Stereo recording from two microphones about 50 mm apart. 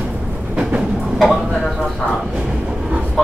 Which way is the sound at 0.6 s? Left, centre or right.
Centre.